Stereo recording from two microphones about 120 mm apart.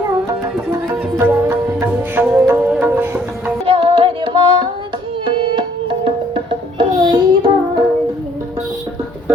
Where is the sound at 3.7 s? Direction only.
50° right (ahead or behind).